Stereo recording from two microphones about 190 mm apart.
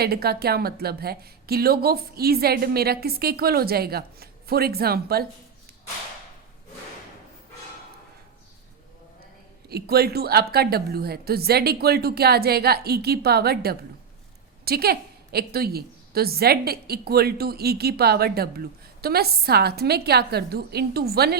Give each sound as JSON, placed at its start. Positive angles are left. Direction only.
{"t": 0.0, "sound": "a woman's voice", "side_deg": -55}
{"t": 9.6, "sound": "a woman's voice", "side_deg": -55}